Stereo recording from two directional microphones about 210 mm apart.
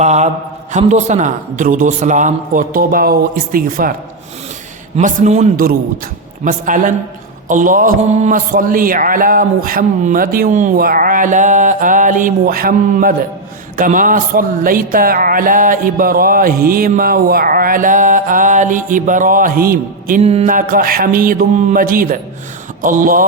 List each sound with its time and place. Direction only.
0.0 s speech: 30° right (ahead or behind)
4.9 s speech: 35° right (ahead or behind)